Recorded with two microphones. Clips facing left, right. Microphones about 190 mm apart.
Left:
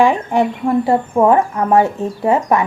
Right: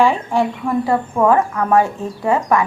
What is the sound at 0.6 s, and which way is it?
Speech, 30° left (ahead or behind).